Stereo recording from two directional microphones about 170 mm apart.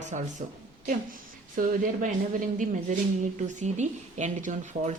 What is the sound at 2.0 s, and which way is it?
A woman's voice, 50° right (ahead or behind).